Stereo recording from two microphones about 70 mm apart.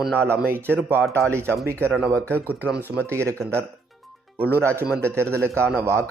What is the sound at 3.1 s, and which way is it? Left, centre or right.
Speech, right.